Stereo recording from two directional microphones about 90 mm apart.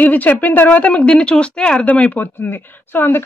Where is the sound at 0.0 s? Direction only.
20° left (ahead or behind).